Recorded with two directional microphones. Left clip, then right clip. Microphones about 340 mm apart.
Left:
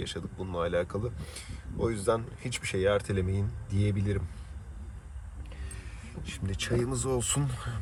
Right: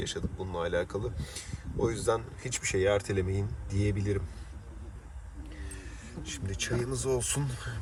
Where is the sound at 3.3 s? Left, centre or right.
Right.